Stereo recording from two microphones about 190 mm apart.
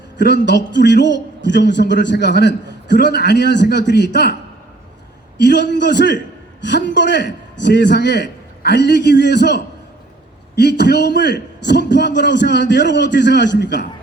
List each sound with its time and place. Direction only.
0.2 s a man's voice: 65° left (ahead or behind)
5.4 s a man's voice: 65° left (ahead or behind)